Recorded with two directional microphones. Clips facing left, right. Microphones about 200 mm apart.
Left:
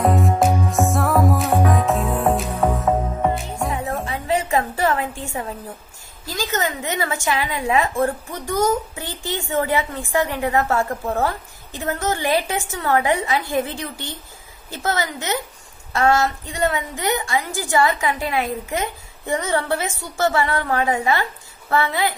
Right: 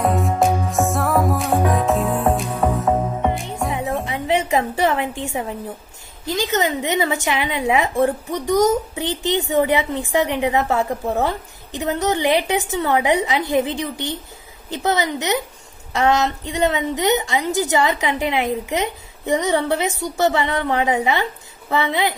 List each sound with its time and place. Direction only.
0.0 s music: centre (ahead or behind)
4.0 s a sound: 20° right (ahead or behind)
5.2 s a woman's voice: 20° right (ahead or behind)